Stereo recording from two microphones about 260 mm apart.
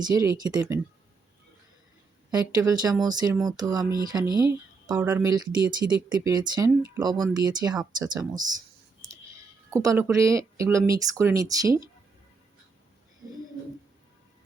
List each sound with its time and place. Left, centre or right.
0.0 s speech: centre
2.3 s speech: centre
9.6 s speech: centre